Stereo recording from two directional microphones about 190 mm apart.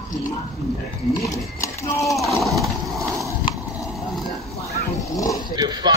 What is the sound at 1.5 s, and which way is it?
Speech, 15° left (ahead or behind).